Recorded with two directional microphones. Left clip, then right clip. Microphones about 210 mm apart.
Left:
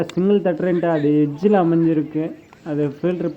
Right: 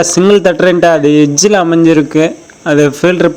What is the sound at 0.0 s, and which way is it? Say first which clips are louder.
Speech: right 11 dB; 25° right (ahead or behind).